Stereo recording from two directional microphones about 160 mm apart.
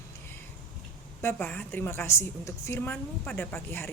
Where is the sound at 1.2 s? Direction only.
10° left (ahead or behind).